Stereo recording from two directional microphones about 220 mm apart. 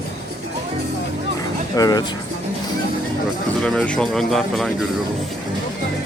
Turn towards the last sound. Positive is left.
turn(degrees=0)  # may be behind; listen again after turning